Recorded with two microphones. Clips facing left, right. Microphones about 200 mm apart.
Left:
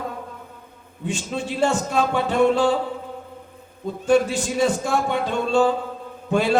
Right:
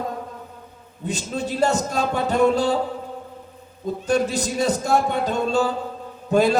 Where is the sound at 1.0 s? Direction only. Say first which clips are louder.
Even; 40° right (ahead or behind).